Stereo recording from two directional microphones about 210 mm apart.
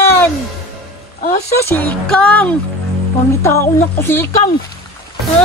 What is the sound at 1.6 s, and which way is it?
Speech, 10° left (ahead or behind).